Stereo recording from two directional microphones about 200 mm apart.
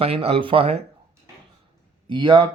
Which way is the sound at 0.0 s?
30° right (ahead or behind).